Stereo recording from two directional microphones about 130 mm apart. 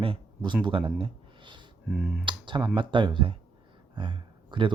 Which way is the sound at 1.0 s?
40° right (ahead or behind).